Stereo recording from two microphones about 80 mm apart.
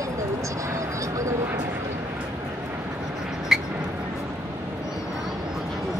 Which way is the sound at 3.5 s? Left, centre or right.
Centre.